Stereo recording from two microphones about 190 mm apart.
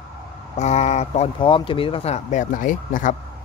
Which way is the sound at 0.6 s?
35° left (ahead or behind).